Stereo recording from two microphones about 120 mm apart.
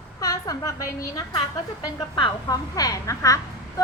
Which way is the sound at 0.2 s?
25° left (ahead or behind).